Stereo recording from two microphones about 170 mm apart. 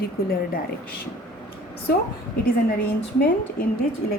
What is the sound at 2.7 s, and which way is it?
Speech, 65° left (ahead or behind).